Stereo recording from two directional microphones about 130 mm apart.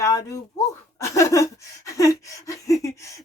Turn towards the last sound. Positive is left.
turn(degrees=25)  # may be behind; listen again after turning